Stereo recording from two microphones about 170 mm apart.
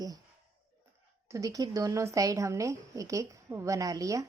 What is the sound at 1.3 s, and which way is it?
A woman's voice, 20° right (ahead or behind).